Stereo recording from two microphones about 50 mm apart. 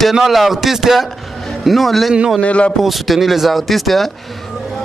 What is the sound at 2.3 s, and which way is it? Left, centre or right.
Speech, left.